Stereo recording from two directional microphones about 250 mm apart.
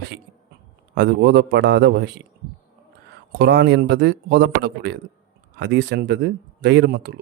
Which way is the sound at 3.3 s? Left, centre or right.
Right.